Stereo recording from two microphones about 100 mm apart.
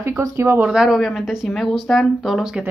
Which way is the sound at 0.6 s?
5° right (ahead or behind).